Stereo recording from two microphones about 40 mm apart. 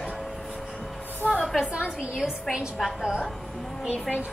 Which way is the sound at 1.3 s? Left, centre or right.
Centre.